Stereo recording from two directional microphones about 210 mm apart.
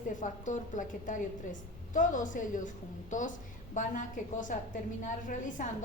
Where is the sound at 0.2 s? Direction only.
35° left (ahead or behind).